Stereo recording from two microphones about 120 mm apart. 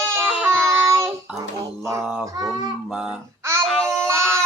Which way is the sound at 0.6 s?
20° right (ahead or behind).